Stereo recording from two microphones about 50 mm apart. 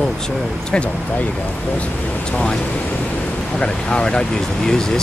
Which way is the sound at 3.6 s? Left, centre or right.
Left.